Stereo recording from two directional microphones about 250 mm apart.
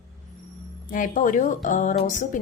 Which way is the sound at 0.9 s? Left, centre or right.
Left.